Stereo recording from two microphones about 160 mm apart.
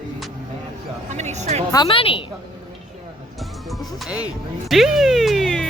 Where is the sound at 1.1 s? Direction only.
45° right (ahead or behind).